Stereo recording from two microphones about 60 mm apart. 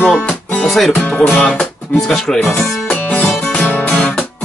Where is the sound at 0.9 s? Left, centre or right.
Left.